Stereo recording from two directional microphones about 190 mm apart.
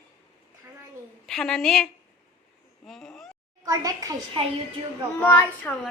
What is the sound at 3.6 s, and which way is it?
Speech, 20° right (ahead or behind).